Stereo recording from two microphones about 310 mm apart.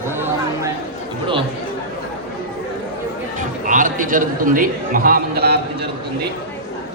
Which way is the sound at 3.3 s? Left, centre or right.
Right.